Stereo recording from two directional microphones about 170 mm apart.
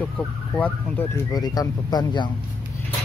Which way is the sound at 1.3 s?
20° left (ahead or behind).